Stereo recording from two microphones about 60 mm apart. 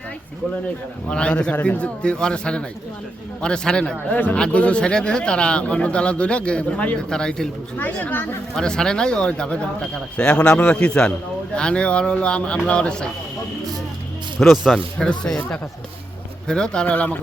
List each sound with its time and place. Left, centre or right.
1.1 s speech: centre
4.1 s a man's voice: left
8.0 s speech: left
8.5 s a man's voice: centre
14.3 s speech: centre
14.9 s speech: centre
16.8 s a man's voice: left